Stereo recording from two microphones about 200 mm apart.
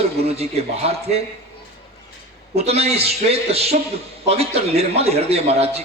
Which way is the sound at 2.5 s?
30° right (ahead or behind).